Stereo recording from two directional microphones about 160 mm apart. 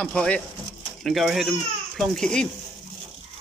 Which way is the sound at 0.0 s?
5° left (ahead or behind).